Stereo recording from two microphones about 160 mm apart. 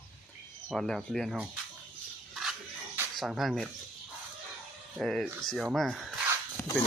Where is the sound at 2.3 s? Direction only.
Centre (ahead or behind).